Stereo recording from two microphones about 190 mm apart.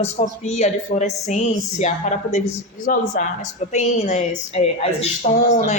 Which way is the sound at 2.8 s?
45° left (ahead or behind).